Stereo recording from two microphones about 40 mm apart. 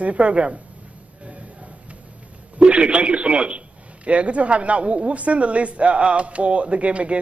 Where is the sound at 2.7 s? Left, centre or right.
Right.